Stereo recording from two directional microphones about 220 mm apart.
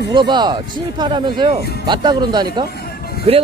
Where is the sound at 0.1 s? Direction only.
20° right (ahead or behind).